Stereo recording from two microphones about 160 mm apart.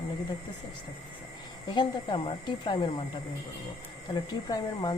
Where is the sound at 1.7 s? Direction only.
30° left (ahead or behind).